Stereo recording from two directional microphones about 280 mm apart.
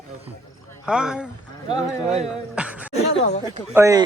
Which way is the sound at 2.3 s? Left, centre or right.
Centre.